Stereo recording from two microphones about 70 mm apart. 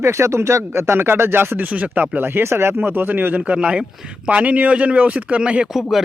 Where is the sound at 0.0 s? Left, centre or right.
Right; by 5.6 s centre.